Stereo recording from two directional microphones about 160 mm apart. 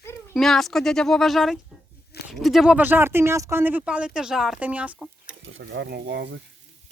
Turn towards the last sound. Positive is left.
turn(degrees=-90)